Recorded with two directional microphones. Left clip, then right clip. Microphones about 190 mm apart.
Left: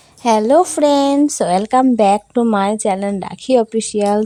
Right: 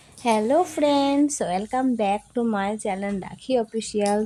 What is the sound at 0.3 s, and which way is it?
Speech, 30° left (ahead or behind).